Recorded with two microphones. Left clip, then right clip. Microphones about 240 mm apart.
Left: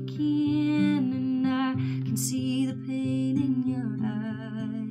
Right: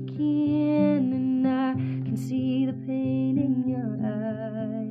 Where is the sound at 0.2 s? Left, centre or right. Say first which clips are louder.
Right 2 dB; centre.